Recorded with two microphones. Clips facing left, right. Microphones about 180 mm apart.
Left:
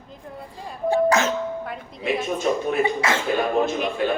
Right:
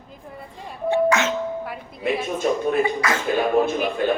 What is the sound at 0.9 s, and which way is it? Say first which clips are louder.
Speech: even; 35° left (ahead or behind).